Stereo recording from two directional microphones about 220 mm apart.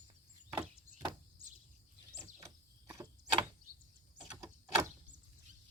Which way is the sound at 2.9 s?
15° right (ahead or behind).